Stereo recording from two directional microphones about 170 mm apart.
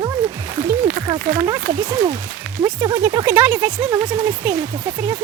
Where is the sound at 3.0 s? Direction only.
10° right (ahead or behind).